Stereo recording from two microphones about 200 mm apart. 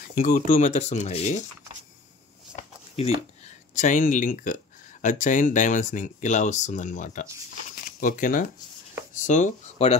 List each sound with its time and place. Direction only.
0.1 s speech: 40° left (ahead or behind)
3.7 s speech: 40° left (ahead or behind)
7.7 s a sound: 45° left (ahead or behind)
9.2 s speech: 35° left (ahead or behind)